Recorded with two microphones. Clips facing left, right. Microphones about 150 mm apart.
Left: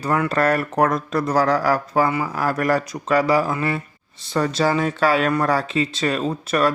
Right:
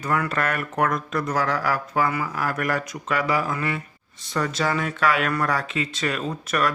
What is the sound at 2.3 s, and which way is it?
Speech, 35° left (ahead or behind).